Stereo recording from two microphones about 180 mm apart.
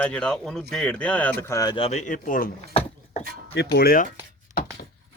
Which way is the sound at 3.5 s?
65° left (ahead or behind).